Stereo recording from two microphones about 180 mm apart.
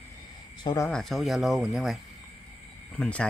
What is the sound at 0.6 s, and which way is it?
Speech, 15° left (ahead or behind).